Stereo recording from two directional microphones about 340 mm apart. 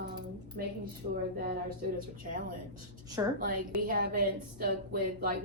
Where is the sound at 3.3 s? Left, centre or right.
Right.